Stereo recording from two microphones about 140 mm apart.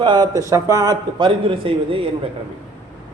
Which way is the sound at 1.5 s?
40° right (ahead or behind).